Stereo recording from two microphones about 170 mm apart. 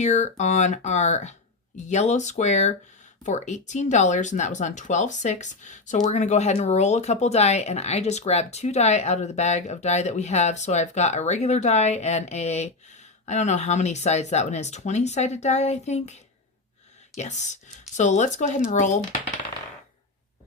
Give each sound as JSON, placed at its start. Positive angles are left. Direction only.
{"t": 0.0, "sound": "speech", "side_deg": 40}